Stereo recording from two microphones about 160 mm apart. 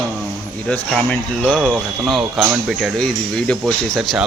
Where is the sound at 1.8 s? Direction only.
Centre (ahead or behind).